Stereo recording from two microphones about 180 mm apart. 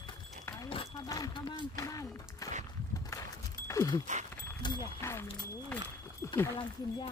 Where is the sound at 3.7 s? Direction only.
20° left (ahead or behind).